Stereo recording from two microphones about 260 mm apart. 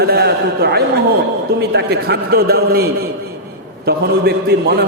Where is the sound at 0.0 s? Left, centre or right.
Right.